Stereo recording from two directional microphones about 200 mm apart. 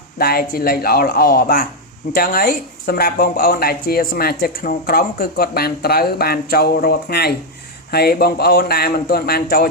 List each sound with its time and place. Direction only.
0.2 s speech: 50° left (ahead or behind)